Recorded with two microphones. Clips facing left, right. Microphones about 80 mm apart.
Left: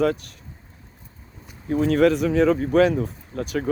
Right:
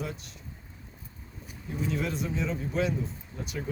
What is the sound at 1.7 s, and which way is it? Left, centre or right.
Speech, left.